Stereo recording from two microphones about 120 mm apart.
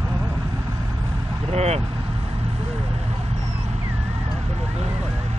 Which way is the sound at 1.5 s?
65° right (ahead or behind).